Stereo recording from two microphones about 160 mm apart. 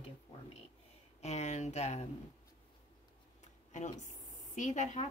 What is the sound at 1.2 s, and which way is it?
Speech, 45° left (ahead or behind).